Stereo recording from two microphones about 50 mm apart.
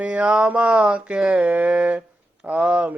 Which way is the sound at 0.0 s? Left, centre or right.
Right.